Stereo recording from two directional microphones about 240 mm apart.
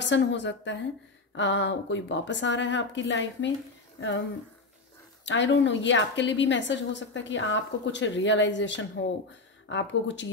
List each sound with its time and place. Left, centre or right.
0.0 s a woman's voice: left
5.2 s a woman's voice: left